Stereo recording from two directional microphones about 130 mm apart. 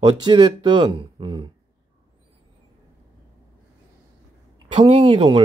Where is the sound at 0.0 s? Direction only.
35° right (ahead or behind).